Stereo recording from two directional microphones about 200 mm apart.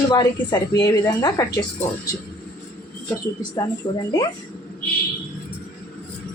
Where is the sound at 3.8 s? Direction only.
25° left (ahead or behind).